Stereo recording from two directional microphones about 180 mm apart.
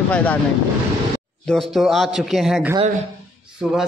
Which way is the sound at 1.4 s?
Centre (ahead or behind).